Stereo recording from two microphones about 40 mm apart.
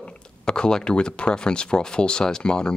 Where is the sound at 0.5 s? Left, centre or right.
Centre.